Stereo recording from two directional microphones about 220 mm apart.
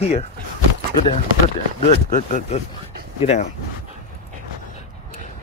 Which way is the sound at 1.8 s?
30° left (ahead or behind).